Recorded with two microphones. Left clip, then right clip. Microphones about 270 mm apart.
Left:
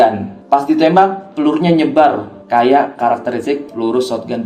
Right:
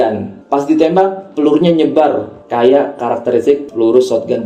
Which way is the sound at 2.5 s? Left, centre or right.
Left.